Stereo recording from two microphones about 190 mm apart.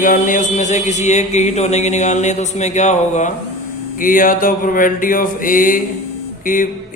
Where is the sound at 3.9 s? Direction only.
45° left (ahead or behind).